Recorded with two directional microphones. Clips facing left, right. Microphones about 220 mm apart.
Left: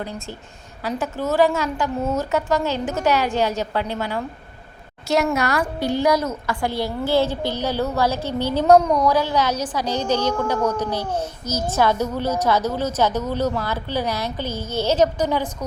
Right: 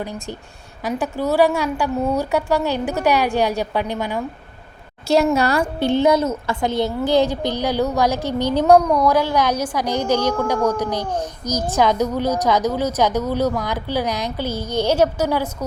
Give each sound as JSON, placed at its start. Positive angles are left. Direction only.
{"t": 0.9, "sound": "a woman's voice", "side_deg": -15}
{"t": 5.0, "sound": "a woman's voice", "side_deg": -30}